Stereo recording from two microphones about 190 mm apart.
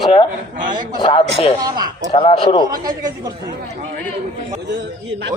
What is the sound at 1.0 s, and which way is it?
Speech, 25° left (ahead or behind).